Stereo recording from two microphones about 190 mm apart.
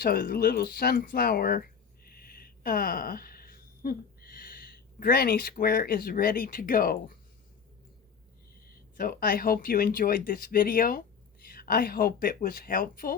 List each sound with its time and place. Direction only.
0.0 s speech: 50° left (ahead or behind)
8.6 s speech: 50° left (ahead or behind)